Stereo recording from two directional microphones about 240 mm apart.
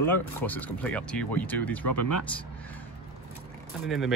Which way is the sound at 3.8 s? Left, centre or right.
Centre.